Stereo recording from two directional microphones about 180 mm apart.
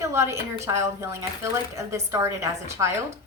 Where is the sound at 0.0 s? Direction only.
15° right (ahead or behind).